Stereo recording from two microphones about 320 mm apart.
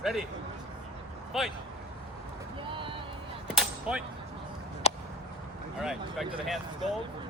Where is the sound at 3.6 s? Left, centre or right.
Centre.